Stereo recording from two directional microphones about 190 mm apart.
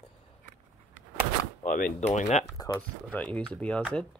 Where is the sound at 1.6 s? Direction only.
45° left (ahead or behind).